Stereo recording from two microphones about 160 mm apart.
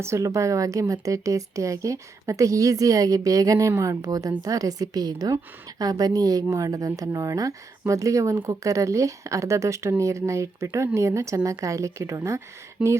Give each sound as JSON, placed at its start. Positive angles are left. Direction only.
{"t": 0.0, "sound": "a woman's voice", "side_deg": -20}